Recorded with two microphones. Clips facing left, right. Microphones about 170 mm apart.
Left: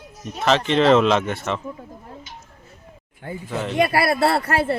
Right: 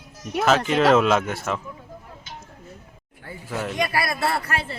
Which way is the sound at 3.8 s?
30° left (ahead or behind).